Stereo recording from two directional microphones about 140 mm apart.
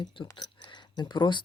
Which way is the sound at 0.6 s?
30° left (ahead or behind).